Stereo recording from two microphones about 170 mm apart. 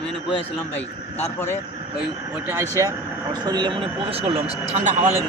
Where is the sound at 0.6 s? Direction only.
10° left (ahead or behind).